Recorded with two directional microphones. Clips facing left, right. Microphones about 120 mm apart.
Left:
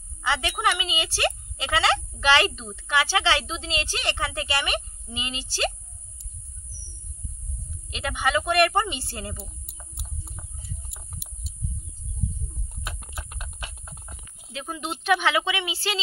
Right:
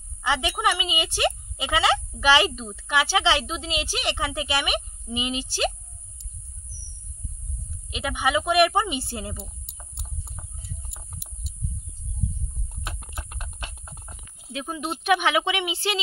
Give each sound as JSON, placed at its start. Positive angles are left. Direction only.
{"t": 0.2, "sound": "speech", "side_deg": -15}
{"t": 7.9, "sound": "a woman's voice", "side_deg": -10}
{"t": 10.3, "sound": "a sound", "side_deg": -15}
{"t": 14.5, "sound": "speech", "side_deg": -10}